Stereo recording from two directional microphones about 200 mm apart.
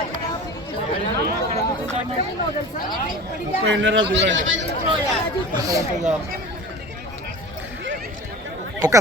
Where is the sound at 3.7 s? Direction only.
70° right (ahead or behind).